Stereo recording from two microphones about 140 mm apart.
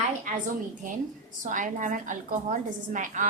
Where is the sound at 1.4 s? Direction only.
65° right (ahead or behind).